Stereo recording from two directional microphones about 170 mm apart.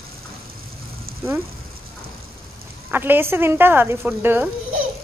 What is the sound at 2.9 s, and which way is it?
Speech, 10° right (ahead or behind).